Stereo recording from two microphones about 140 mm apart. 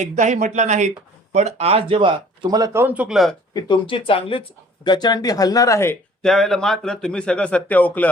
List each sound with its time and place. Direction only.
0.0 s speech: 60° right (ahead or behind); by 2.8 s 25° right (ahead or behind)
2.8 s speech: 10° right (ahead or behind)
3.5 s speech: 35° left (ahead or behind); by 6.0 s 20° left (ahead or behind)
6.2 s speech: centre (ahead or behind)